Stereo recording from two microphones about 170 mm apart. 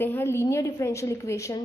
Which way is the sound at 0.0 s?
15° left (ahead or behind).